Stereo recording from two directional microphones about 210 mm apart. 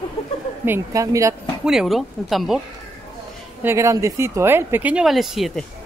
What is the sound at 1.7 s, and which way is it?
Speech, centre (ahead or behind).